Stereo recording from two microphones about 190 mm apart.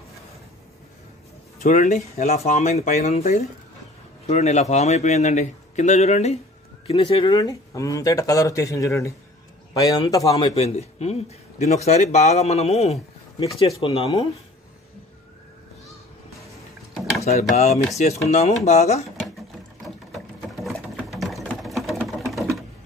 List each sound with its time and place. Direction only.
1.6 s a man's voice: 40° left (ahead or behind); by 10.5 s 20° left (ahead or behind)
10.5 s a man's voice: 35° left (ahead or behind)
17.2 s a man's voice: 35° left (ahead or behind)
20.1 s sewing machine: centre (ahead or behind)
21.8 s a sound: centre (ahead or behind)